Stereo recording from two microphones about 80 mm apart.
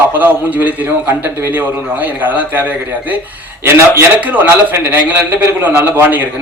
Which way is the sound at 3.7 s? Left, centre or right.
Right.